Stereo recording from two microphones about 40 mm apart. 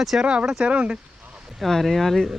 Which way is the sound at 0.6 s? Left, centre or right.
Right.